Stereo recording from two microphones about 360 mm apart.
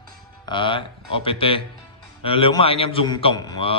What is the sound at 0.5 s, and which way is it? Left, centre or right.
A man's voice, centre.